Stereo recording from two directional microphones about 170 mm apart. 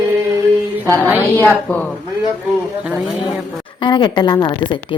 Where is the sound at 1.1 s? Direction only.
10° right (ahead or behind).